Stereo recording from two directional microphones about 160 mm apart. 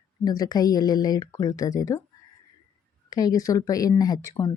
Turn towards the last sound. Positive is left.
turn(degrees=25)  # may be behind; listen again after turning